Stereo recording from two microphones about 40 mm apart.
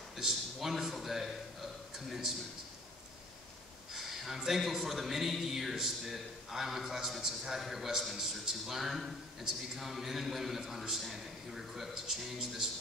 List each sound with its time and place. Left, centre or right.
0.2 s a man's voice: centre
3.9 s a sound: centre
4.4 s a man's voice: centre